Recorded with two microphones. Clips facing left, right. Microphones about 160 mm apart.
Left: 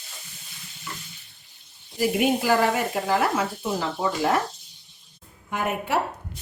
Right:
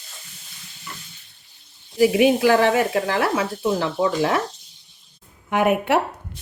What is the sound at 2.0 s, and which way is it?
Speech, 90° right.